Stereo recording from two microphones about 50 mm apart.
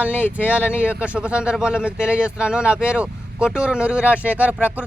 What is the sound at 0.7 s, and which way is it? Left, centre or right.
Speech, right.